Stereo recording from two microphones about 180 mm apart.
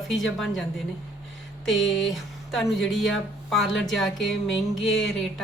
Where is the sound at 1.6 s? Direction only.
Centre (ahead or behind).